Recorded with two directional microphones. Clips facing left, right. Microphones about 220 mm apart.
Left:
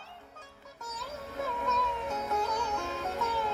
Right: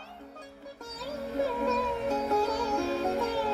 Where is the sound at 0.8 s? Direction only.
30° right (ahead or behind).